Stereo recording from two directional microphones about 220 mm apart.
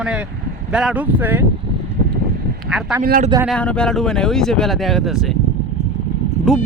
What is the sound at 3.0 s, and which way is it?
Speech, 40° right (ahead or behind).